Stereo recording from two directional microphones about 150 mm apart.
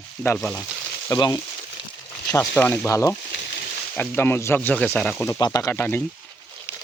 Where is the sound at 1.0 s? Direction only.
25° left (ahead or behind); by 5.2 s 5° left (ahead or behind).